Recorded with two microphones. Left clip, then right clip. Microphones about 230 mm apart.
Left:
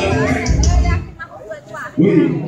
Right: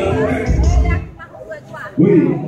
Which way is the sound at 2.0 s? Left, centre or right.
Left.